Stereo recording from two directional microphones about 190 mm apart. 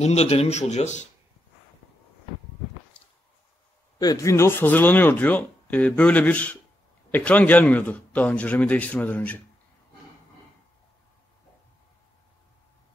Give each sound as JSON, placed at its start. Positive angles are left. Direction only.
{"t": 0.0, "sound": "speech", "side_deg": 35}
{"t": 4.0, "sound": "speech", "side_deg": 20}